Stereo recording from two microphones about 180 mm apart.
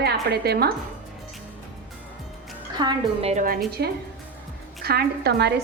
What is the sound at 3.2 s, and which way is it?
Speech, 45° right (ahead or behind).